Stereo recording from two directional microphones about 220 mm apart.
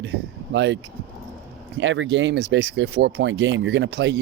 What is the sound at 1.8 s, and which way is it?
Speech, 55° right (ahead or behind).